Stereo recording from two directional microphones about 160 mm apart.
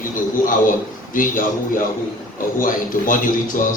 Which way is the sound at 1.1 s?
60° left (ahead or behind).